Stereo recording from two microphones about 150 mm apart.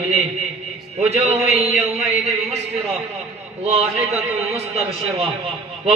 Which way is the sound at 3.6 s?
45° right (ahead or behind).